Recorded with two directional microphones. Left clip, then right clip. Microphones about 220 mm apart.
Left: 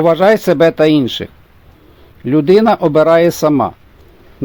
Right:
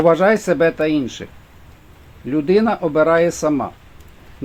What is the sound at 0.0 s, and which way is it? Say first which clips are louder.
Speech: left 4 dB; 40° left (ahead or behind).